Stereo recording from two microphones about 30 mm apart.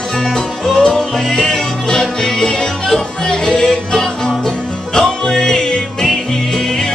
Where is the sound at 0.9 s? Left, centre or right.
Centre.